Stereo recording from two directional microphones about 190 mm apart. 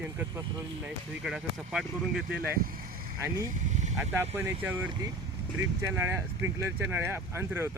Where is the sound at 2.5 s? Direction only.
50° right (ahead or behind).